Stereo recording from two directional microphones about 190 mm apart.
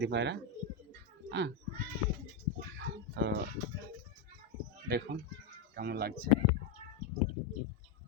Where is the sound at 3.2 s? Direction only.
65° right (ahead or behind).